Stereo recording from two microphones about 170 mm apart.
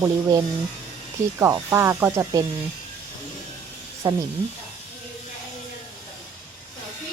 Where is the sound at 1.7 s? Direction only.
15° right (ahead or behind).